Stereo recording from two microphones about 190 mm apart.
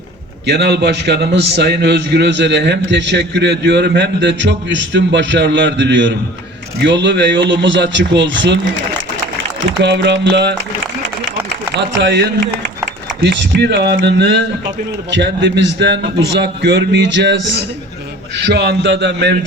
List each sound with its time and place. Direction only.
0.4 s a man's voice: 65° right (ahead or behind)
11.7 s a man's voice: 60° right (ahead or behind)